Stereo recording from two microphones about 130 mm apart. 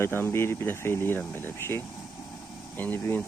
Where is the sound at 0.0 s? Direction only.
20° left (ahead or behind).